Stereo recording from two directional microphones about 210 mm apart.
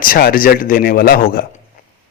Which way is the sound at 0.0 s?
45° left (ahead or behind).